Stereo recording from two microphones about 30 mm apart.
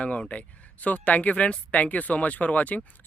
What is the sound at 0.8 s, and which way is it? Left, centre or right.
Speech, left.